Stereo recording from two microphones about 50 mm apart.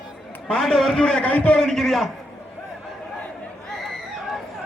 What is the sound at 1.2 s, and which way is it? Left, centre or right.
Speech, left.